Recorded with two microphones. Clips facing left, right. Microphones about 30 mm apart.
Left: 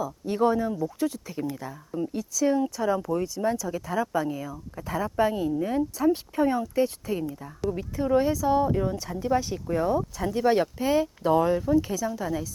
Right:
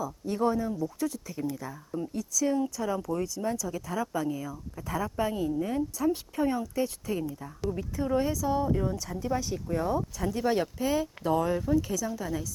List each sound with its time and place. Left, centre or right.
0.0 s speech: left
11.5 s speech: centre
11.8 s speech: centre
12.0 s speech: centre